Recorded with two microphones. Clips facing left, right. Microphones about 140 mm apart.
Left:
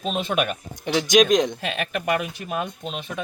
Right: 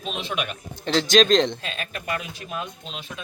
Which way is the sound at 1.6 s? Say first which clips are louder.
Left 7 dB; 65° left (ahead or behind).